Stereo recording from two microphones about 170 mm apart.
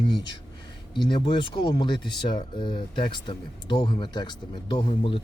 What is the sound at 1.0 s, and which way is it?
Speech, 30° left (ahead or behind).